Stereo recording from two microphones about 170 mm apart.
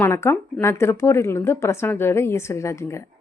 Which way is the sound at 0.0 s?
15° left (ahead or behind).